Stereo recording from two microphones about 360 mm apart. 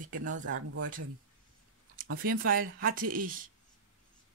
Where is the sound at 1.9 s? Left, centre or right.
Right.